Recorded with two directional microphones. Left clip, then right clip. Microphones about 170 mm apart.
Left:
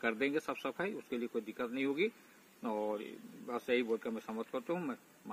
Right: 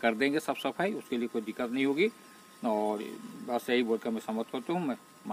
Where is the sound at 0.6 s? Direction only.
40° right (ahead or behind).